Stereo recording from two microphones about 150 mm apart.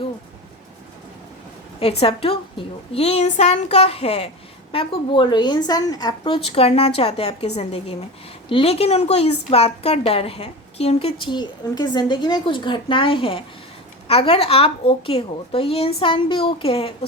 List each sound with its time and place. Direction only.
1.8 s a woman's voice: 40° left (ahead or behind)